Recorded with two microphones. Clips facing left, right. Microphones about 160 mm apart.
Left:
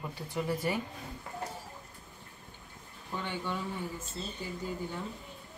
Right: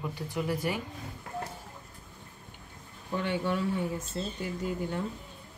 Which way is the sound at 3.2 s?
70° right (ahead or behind).